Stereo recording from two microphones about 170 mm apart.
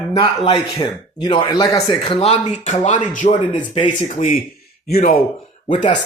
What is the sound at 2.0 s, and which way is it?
A man's voice, 35° left (ahead or behind).